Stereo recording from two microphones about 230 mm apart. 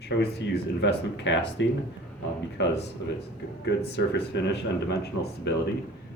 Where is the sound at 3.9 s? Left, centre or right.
Left.